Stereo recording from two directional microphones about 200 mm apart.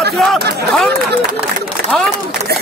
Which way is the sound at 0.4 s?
50° right (ahead or behind).